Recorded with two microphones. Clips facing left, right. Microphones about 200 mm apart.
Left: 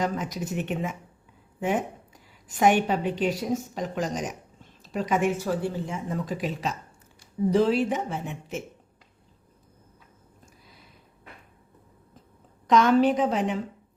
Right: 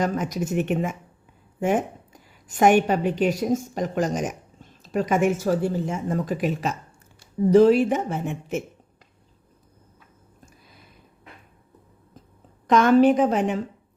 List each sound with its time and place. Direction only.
0.0 s speech: 50° right (ahead or behind)
12.6 s speech: 50° right (ahead or behind)